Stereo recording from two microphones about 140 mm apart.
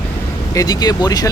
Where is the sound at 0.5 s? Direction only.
25° left (ahead or behind).